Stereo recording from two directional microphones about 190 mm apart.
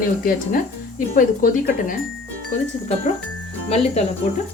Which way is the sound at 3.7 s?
35° left (ahead or behind).